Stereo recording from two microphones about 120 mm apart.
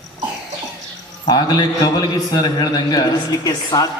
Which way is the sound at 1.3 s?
35° left (ahead or behind).